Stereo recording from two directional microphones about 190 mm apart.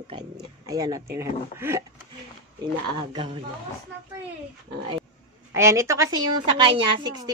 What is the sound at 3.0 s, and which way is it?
Speech, 25° right (ahead or behind).